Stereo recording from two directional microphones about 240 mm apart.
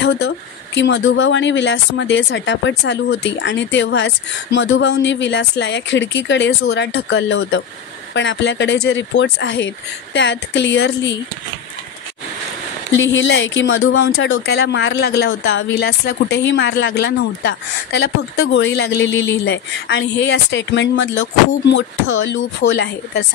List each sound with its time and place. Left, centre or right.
0.7 s speech: left
12.9 s speech: left